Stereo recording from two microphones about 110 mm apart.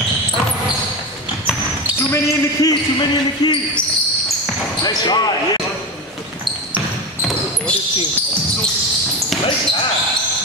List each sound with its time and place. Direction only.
2.0 s speech: 30° left (ahead or behind)
2.7 s speech: 40° left (ahead or behind)
4.8 s speech: 40° left (ahead or behind)